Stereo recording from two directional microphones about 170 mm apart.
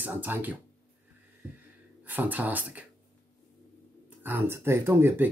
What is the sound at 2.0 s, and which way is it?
Speech, 10° right (ahead or behind).